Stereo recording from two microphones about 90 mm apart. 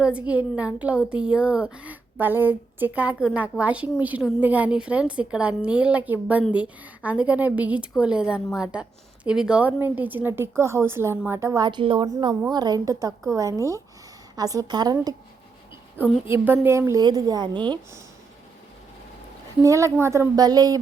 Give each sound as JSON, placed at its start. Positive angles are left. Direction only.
{"t": 0.0, "sound": "a child's voice", "side_deg": -15}
{"t": 11.6, "sound": "a woman's voice", "side_deg": -65}
{"t": 12.5, "sound": "a woman's voice", "side_deg": -50}
{"t": 16.2, "sound": "speech", "side_deg": -25}
{"t": 17.0, "sound": "a woman's voice", "side_deg": -50}
{"t": 19.6, "sound": "a child's voice", "side_deg": -35}
{"t": 20.3, "sound": "a woman's voice", "side_deg": -45}